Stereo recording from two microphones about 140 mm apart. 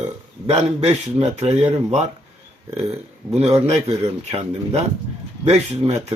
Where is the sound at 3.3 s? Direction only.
45° right (ahead or behind).